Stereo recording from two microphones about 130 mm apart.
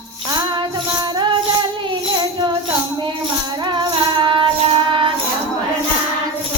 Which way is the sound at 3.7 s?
40° right (ahead or behind).